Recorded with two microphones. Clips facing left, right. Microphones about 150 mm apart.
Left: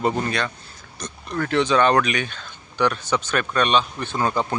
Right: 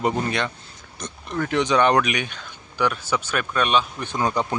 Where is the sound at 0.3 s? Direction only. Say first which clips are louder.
Even; 20° right (ahead or behind).